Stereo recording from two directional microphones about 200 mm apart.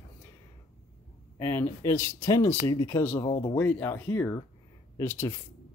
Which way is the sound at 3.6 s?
10° left (ahead or behind).